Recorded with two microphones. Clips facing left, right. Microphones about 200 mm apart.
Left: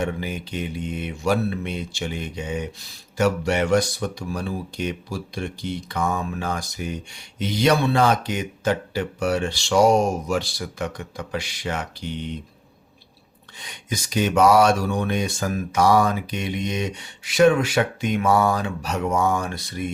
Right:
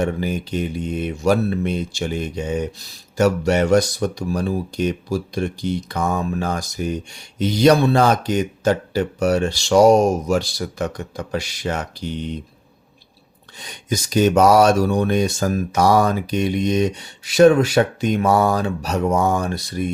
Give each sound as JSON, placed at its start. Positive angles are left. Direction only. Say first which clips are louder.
{"t": 0.0, "sound": "speech", "louder": "right 5 dB", "side_deg": -40}
{"t": 13.6, "sound": "speech", "louder": "right 6 dB", "side_deg": -40}